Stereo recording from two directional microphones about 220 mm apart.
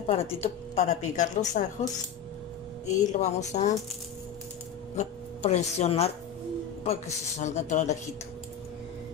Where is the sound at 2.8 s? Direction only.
35° left (ahead or behind).